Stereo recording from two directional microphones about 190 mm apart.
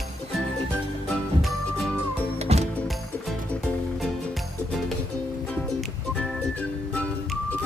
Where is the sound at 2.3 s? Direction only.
35° right (ahead or behind).